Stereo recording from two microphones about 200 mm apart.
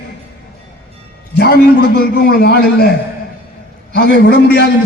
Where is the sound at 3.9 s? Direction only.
55° left (ahead or behind).